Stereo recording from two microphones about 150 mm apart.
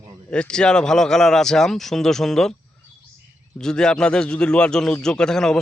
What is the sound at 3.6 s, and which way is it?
Speech, 5° left (ahead or behind).